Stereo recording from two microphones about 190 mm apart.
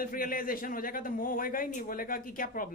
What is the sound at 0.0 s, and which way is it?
A man's voice, 50° left (ahead or behind).